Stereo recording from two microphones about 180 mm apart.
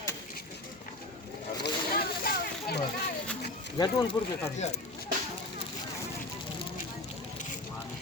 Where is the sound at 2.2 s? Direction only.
60° left (ahead or behind).